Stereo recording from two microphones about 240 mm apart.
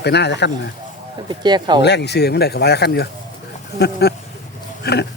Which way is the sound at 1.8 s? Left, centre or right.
Left.